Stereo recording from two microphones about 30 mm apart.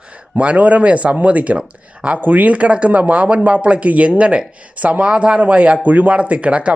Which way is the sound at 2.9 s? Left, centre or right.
Right.